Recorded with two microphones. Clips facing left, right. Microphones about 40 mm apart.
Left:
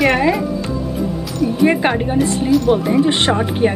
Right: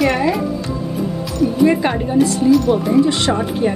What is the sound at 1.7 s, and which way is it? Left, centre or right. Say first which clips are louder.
Speech: left 1 dB; left.